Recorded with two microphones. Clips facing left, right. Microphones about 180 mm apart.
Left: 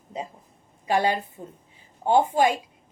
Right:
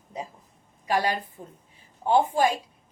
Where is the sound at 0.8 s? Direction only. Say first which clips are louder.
Left 3 dB; 25° left (ahead or behind).